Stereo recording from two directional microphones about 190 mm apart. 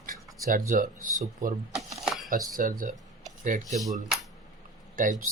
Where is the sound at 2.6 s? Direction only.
45° right (ahead or behind).